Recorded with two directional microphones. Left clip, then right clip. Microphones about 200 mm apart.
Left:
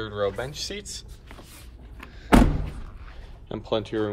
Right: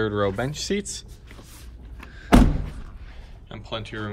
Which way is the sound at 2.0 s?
5° right (ahead or behind).